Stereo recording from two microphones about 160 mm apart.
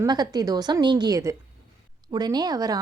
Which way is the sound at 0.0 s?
25° right (ahead or behind).